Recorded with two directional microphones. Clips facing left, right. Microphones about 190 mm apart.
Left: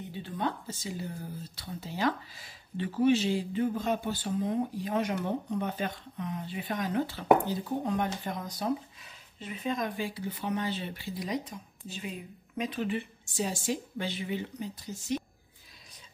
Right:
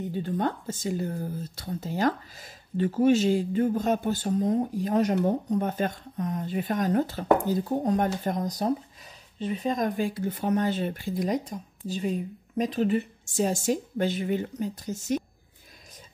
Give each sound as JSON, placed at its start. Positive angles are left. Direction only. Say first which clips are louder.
{"t": 0.1, "sound": "speech", "louder": "right 4 dB", "side_deg": -45}